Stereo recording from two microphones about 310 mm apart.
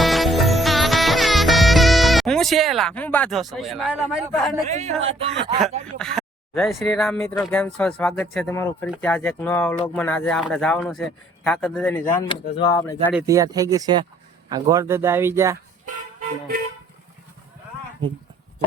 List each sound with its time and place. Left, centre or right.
0.0 s music: centre
4.7 s speech: right
6.0 s speech: centre
13.2 s speech: centre